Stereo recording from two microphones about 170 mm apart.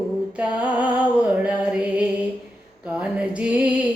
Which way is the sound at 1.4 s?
5° right (ahead or behind).